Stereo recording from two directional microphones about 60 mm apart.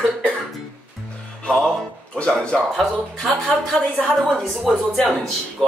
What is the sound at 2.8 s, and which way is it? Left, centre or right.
Speech, centre.